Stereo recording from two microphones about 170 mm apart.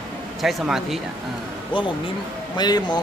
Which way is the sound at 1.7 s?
30° left (ahead or behind).